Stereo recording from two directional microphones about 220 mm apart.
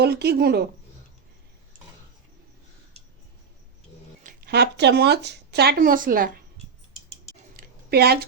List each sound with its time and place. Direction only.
0.0 s speech: 50° right (ahead or behind)
4.2 s speech: 40° right (ahead or behind)
7.5 s a sound: 45° right (ahead or behind)